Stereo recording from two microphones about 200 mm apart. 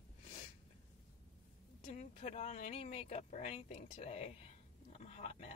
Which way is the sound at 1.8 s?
35° left (ahead or behind).